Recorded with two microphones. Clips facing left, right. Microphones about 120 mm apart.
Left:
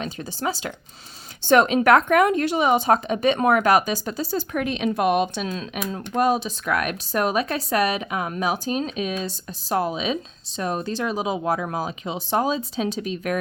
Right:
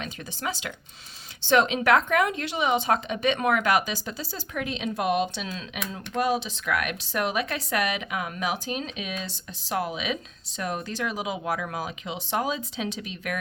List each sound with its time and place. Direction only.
0.0 s a woman's voice: 35° left (ahead or behind)
1.5 s a woman's voice: 45° left (ahead or behind)